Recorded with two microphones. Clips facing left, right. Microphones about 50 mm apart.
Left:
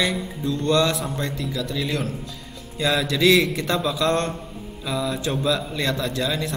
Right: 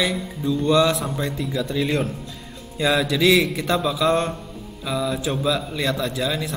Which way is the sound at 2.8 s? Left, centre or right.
Centre.